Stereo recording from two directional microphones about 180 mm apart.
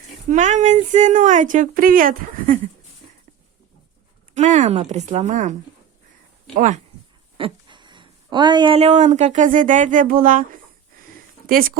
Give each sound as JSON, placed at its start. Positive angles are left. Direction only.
{"t": 0.3, "sound": "speech", "side_deg": -45}
{"t": 4.4, "sound": "speech", "side_deg": -40}
{"t": 7.3, "sound": "speech", "side_deg": -30}